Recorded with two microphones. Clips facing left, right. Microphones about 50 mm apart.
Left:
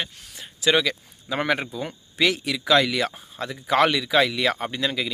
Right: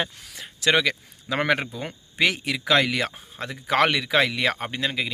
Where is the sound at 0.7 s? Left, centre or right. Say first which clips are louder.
Even; right.